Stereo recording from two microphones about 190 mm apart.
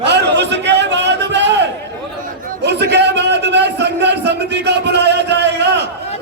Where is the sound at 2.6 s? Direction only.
65° right (ahead or behind).